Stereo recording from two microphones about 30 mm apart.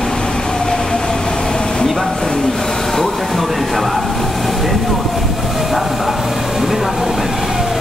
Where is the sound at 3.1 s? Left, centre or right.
Centre.